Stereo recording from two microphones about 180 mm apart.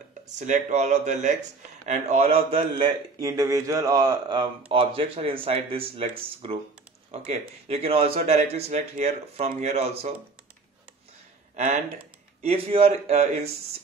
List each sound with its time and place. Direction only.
0.3 s a man's voice: 40° right (ahead or behind)
11.5 s a man's voice: 40° right (ahead or behind)